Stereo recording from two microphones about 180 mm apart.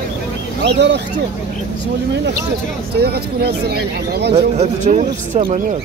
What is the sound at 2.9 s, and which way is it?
Speech, 65° right (ahead or behind).